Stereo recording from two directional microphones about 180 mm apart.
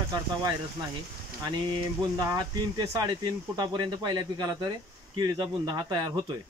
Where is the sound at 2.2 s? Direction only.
20° right (ahead or behind).